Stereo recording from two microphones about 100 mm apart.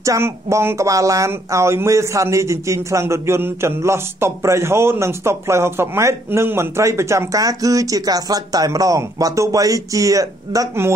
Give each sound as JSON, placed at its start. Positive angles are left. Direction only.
{"t": 0.0, "sound": "a woman's voice", "side_deg": -30}